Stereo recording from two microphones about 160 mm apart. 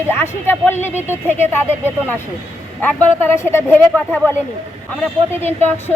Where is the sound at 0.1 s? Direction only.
15° left (ahead or behind).